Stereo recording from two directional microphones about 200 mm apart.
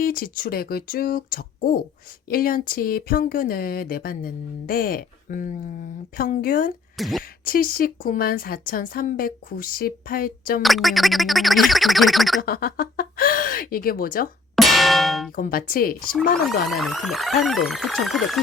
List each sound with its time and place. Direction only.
0.0 s speech: 45° left (ahead or behind)
6.9 s speech: centre (ahead or behind)
7.4 s speech: 45° left (ahead or behind)
10.6 s speech: centre (ahead or behind)
12.4 s speech: 50° left (ahead or behind)
14.5 s clang: centre (ahead or behind)
15.4 s speech: 45° left (ahead or behind)
16.5 s speech: centre (ahead or behind)